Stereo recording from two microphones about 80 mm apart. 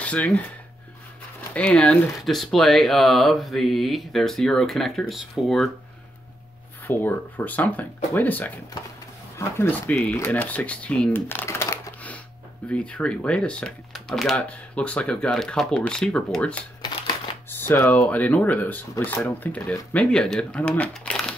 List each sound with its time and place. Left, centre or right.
0.0 s a sound: centre
1.5 s speech: centre
2.2 s speech: centre
6.9 s speech: left
9.4 s speech: left
9.9 s speech: centre
11.1 s shuffling cards: left
12.6 s speech: centre
13.9 s typing: centre
14.8 s speech: centre
17.5 s a sound: left
17.9 s speech: centre